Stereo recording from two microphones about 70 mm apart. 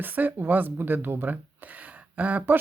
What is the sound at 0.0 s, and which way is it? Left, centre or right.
Speech, right.